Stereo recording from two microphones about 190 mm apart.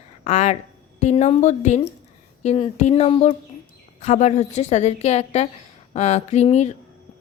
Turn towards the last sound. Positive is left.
turn(degrees=35)  # may be behind; listen again after turning